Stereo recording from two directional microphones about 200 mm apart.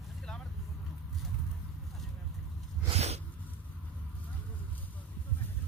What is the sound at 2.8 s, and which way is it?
Sneeze, 30° right (ahead or behind).